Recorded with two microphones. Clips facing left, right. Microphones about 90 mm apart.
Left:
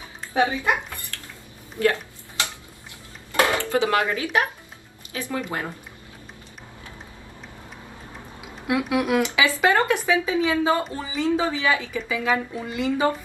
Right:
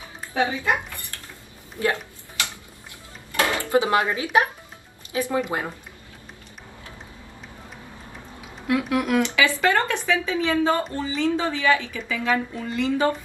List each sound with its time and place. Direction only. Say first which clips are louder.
0.3 s a woman's voice: left 1 dB; 20° left (ahead or behind)
1.1 s a sound: left 1 dB; 20° right (ahead or behind)
3.3 s dishes: left 2 dB; 20° left (ahead or behind)
3.7 s speech: right 5 dB; 20° right (ahead or behind)
8.6 s speech: even; 15° left (ahead or behind)